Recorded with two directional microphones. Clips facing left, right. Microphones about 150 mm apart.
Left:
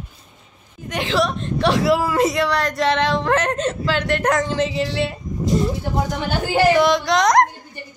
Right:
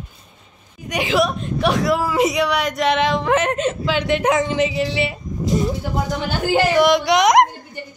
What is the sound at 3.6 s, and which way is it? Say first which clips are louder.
Speech: right 1 dB; 15° right (ahead or behind).